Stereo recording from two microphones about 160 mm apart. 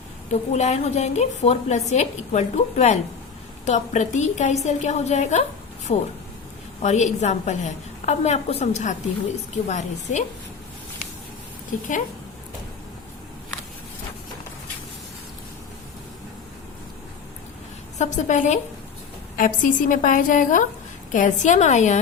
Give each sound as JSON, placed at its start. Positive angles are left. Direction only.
{"t": 0.3, "sound": "a woman's voice", "side_deg": 45}
{"t": 11.7, "sound": "a woman's voice", "side_deg": 55}
{"t": 17.9, "sound": "a woman's voice", "side_deg": 50}